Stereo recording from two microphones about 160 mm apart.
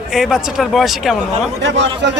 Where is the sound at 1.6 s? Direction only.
90° right.